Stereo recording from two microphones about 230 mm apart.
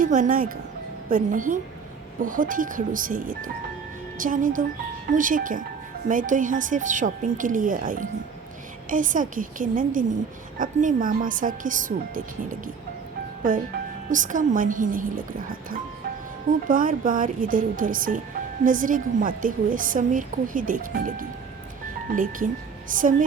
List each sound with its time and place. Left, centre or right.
0.0 s a woman's voice: right
14.1 s a woman's voice: right
16.5 s a woman's voice: right